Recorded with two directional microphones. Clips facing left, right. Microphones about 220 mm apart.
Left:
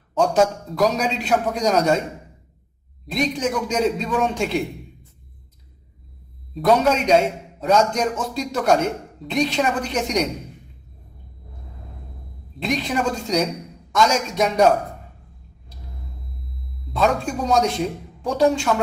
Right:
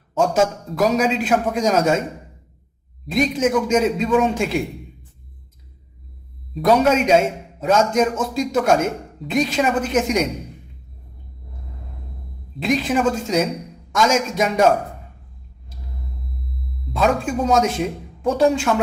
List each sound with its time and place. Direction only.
0.1 s a man's voice: 5° right (ahead or behind)
3.1 s a man's voice: 5° right (ahead or behind)
6.5 s a man's voice: 5° right (ahead or behind)
12.5 s a man's voice: 5° right (ahead or behind)
16.8 s a man's voice: 5° right (ahead or behind)